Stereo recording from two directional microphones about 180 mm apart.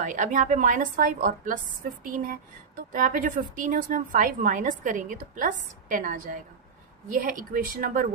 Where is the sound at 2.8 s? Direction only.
50° right (ahead or behind).